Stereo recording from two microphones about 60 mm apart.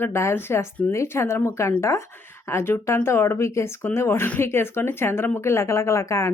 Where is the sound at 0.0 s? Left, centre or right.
Left.